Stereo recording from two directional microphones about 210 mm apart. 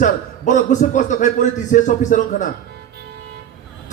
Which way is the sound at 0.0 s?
35° left (ahead or behind).